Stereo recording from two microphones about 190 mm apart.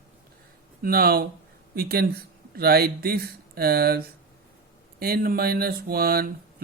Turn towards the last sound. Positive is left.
turn(degrees=-50)  # may be behind; listen again after turning